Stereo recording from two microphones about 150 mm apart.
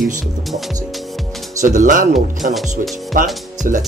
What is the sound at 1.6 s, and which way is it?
Speech, 55° right (ahead or behind).